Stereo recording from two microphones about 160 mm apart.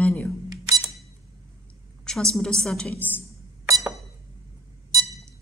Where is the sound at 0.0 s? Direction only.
10° left (ahead or behind).